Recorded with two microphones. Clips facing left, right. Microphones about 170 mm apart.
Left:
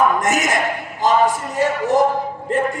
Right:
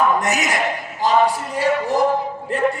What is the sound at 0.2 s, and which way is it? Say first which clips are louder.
A man's voice: left 2 dB; 50° left (ahead or behind).